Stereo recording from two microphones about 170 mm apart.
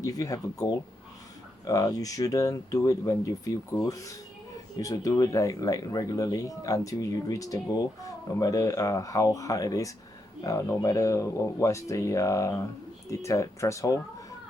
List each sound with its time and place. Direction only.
0.0 s speech: 20° left (ahead or behind)